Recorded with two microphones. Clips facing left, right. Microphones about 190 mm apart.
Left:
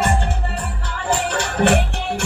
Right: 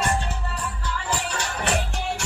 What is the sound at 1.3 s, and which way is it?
Music, 60° left (ahead or behind).